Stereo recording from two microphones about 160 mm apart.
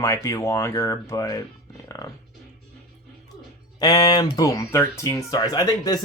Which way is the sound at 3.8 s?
25° left (ahead or behind).